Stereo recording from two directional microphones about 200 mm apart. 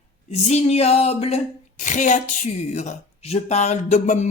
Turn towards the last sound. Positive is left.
turn(degrees=35)  # may be behind; listen again after turning